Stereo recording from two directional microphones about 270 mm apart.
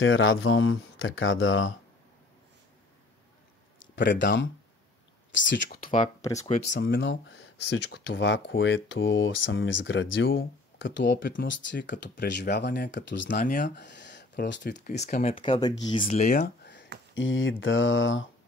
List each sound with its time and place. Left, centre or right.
0.0 s speech: left
3.8 s speech: left
5.9 s speech: centre
6.7 s speech: left
13.3 s speech: left
15.0 s speech: left